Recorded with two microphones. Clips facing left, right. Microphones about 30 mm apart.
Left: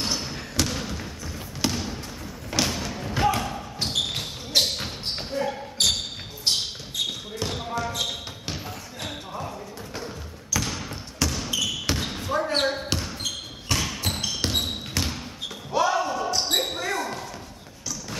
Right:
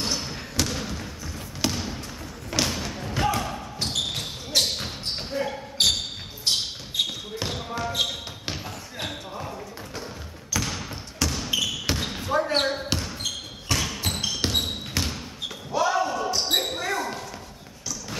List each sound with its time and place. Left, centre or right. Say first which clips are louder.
0.0 s basketball bounce: even; centre
2.5 s thump: even; centre
3.8 s basketball bounce: left 1 dB; centre
7.0 s basketball bounce: right 2 dB; right
7.4 s basketball bounce: left 1 dB; centre
7.7 s basketball bounce: right 3 dB; centre
9.4 s basketball bounce: left 1 dB; centre